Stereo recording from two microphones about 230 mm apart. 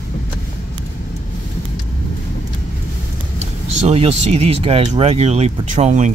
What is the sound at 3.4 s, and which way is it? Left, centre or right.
Speech, right.